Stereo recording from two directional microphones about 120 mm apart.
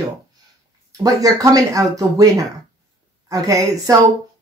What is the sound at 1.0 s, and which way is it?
Speech, 30° right (ahead or behind).